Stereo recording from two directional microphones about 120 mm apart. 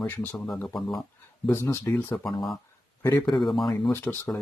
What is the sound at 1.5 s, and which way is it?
Speech, 20° left (ahead or behind).